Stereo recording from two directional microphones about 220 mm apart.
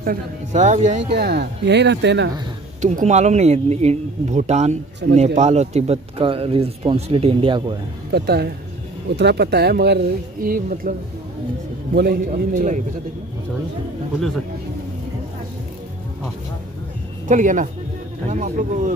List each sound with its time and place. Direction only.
0.0 s speech: 35° right (ahead or behind)
1.1 s speech: 50° right (ahead or behind)
2.8 s speech: 30° right (ahead or behind)
8.1 s speech: 50° right (ahead or behind)
17.3 s speech: 35° right (ahead or behind)